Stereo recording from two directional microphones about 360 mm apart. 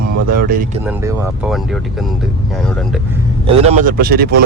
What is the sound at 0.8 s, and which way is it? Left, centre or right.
Speech, centre.